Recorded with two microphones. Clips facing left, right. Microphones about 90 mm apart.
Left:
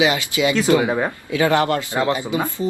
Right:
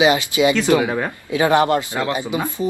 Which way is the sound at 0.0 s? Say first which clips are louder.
Right 3 dB; 20° right (ahead or behind).